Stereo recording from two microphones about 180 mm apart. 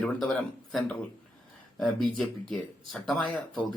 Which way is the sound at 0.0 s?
Centre (ahead or behind).